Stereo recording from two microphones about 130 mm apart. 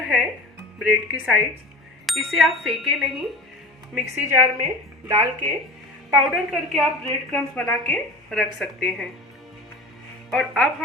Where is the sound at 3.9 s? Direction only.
20° right (ahead or behind).